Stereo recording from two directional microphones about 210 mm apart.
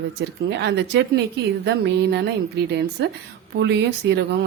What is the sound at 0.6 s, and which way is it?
A woman's voice, 55° right (ahead or behind).